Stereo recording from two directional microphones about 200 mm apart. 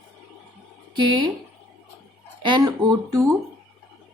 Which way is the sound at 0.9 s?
25° right (ahead or behind).